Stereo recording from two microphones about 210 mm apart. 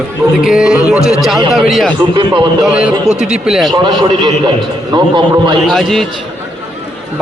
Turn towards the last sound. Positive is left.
turn(degrees=0)  # may be behind; listen again after turning